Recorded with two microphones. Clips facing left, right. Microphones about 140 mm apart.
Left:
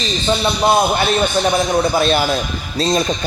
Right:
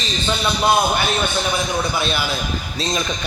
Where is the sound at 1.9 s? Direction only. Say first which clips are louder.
Left 7 dB; 45° left (ahead or behind).